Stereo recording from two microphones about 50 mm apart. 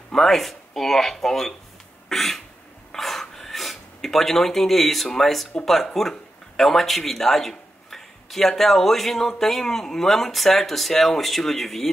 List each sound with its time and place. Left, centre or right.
0.1 s speech: centre
2.0 s a sound: centre
5.9 s speech: centre